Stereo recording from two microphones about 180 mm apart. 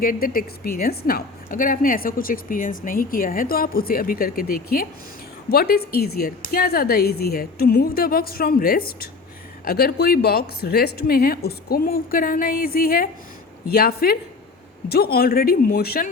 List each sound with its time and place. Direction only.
0.0 s a woman's voice: 55° left (ahead or behind)